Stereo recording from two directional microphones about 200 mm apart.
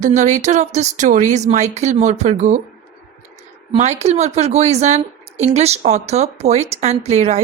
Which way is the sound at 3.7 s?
35° right (ahead or behind).